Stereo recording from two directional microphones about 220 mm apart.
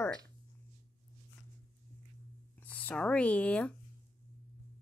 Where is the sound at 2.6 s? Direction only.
5° left (ahead or behind).